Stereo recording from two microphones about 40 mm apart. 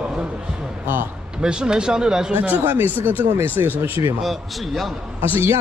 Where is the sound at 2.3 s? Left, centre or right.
Right.